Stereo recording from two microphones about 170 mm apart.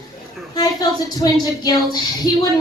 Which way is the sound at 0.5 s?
20° left (ahead or behind).